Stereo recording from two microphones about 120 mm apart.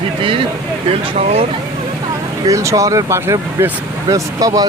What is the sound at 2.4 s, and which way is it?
Speech, 25° right (ahead or behind).